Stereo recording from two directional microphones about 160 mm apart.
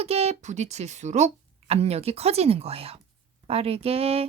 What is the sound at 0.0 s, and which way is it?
Speech, 40° right (ahead or behind).